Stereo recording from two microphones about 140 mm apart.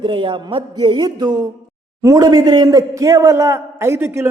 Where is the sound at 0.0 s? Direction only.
35° right (ahead or behind).